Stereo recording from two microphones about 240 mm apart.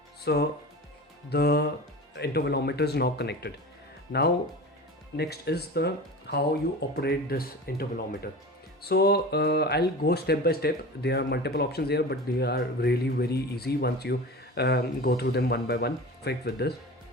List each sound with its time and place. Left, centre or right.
0.3 s speech: left
5.1 s speech: left